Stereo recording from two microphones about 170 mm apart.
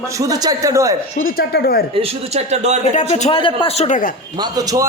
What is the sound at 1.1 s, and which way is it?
Speech, 60° left (ahead or behind).